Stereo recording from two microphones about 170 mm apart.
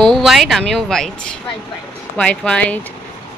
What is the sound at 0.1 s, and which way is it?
Speech, centre (ahead or behind).